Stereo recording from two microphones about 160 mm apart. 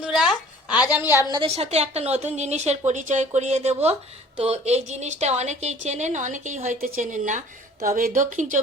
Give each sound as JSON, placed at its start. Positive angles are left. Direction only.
{"t": 0.0, "sound": "a sound", "side_deg": -5}
{"t": 0.9, "sound": "a woman's voice", "side_deg": -15}
{"t": 1.3, "sound": "a woman's voice", "side_deg": -35}